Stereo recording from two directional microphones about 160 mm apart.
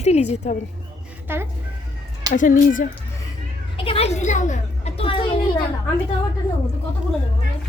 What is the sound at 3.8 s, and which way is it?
A child's voice, 35° left (ahead or behind).